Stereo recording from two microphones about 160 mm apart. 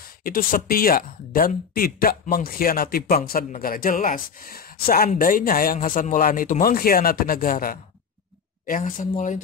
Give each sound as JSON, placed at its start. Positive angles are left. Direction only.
{"t": 0.2, "sound": "speech", "side_deg": 60}